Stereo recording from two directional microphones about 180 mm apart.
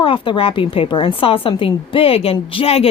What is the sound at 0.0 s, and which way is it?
A woman's voice, 30° left (ahead or behind).